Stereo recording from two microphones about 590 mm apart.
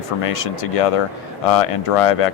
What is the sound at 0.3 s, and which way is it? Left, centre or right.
Speech, left.